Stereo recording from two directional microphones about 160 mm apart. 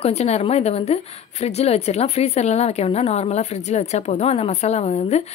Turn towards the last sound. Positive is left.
turn(degrees=45)  # may be behind; listen again after turning